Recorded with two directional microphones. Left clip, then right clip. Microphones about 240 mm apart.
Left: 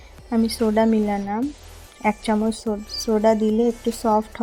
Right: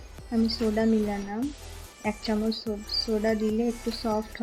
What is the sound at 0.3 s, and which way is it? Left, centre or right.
Speech, left.